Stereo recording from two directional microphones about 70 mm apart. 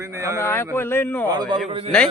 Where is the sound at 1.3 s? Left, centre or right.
Right.